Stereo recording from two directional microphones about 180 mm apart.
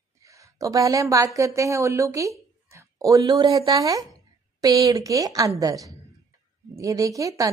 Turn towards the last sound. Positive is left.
turn(degrees=-20)  # may be behind; listen again after turning